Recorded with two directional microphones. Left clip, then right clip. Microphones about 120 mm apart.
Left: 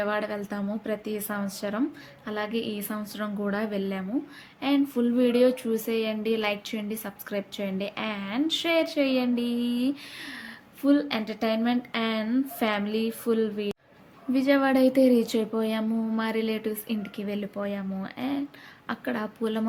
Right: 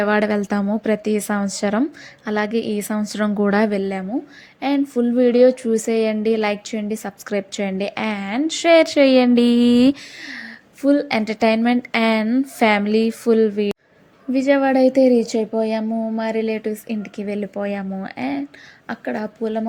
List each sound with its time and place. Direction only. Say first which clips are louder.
0.0 s a woman's voice: right 10 dB; 90° right; by 4.0 s 65° right (ahead or behind)
4.6 s a woman's voice: right 6 dB; 55° right (ahead or behind); by 10.0 s 90° right
10.2 s a woman's voice: right 6 dB; 55° right (ahead or behind); by 13.7 s 70° right (ahead or behind)
14.3 s speech: right 7 dB; 35° right (ahead or behind)
18.9 s a woman's voice: right 5 dB; 30° right (ahead or behind)